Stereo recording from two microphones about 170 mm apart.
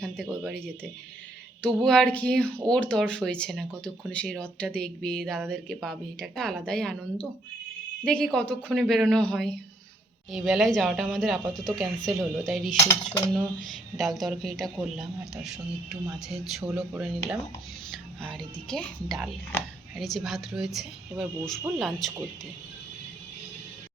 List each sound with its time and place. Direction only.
0.0 s speech: 5° left (ahead or behind)